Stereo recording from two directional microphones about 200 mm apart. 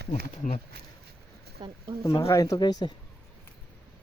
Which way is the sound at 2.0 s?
15° left (ahead or behind).